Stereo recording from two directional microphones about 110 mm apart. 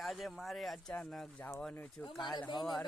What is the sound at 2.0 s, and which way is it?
Speech, 45° left (ahead or behind).